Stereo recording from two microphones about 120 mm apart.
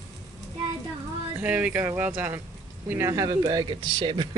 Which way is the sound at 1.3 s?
10° right (ahead or behind).